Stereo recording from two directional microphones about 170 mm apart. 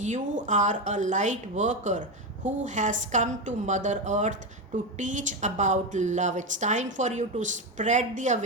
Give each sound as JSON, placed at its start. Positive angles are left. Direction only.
{"t": 0.0, "sound": "speech", "side_deg": -45}